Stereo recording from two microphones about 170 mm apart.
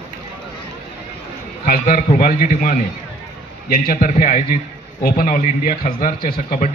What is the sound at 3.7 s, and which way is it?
A man's voice, 55° left (ahead or behind).